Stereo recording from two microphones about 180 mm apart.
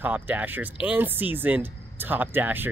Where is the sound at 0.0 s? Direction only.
10° right (ahead or behind).